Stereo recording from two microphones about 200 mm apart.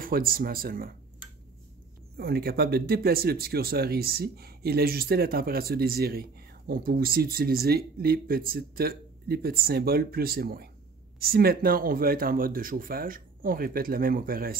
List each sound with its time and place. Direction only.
0.0 s speech: 45° right (ahead or behind)
2.1 s speech: 50° right (ahead or behind)